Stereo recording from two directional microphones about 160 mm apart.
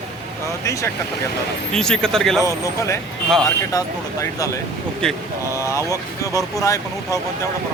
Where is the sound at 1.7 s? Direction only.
5° left (ahead or behind).